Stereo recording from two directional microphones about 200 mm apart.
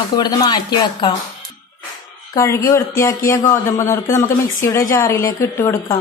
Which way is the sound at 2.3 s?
15° left (ahead or behind).